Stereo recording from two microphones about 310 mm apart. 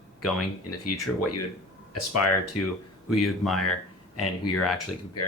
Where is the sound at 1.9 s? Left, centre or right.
Left.